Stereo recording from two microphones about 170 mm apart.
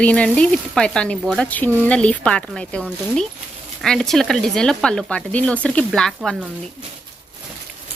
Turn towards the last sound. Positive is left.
turn(degrees=5)  # may be behind; listen again after turning